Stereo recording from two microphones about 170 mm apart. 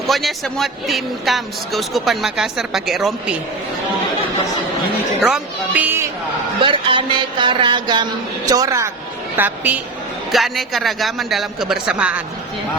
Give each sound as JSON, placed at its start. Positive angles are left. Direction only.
{"t": 0.1, "sound": "speech", "side_deg": 0}
{"t": 5.2, "sound": "speech", "side_deg": -5}
{"t": 6.6, "sound": "a woman's voice", "side_deg": -30}
{"t": 10.3, "sound": "speech", "side_deg": 0}